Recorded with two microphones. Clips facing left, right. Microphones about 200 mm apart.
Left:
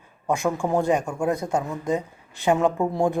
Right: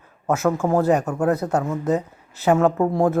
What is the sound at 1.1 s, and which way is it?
Speech, 10° left (ahead or behind).